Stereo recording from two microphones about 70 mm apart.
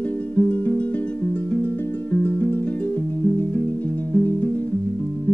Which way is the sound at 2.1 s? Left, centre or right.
Left.